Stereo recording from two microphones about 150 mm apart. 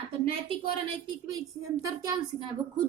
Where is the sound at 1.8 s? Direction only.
25° right (ahead or behind).